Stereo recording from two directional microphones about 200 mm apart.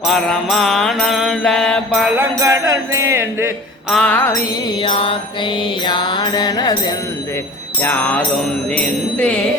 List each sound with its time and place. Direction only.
0.1 s mantra: centre (ahead or behind)
2.1 s music: 15° right (ahead or behind)
3.8 s music: 5° left (ahead or behind)
4.8 s mantra: 25° left (ahead or behind)
7.8 s music: 10° left (ahead or behind)
8.7 s jingle bell: 5° left (ahead or behind)